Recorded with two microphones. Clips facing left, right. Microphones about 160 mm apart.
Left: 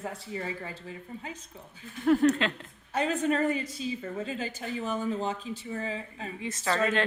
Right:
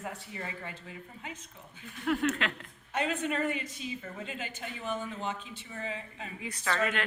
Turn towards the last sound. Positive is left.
turn(degrees=30)  # may be behind; listen again after turning